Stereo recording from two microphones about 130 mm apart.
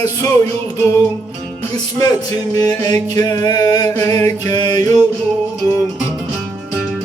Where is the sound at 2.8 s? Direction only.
30° left (ahead or behind).